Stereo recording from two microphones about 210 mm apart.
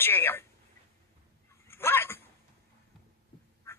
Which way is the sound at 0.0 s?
10° left (ahead or behind).